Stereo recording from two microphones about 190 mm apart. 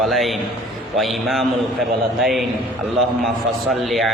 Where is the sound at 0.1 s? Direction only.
Centre (ahead or behind).